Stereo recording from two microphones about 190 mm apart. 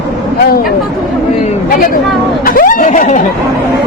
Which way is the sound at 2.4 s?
50° left (ahead or behind).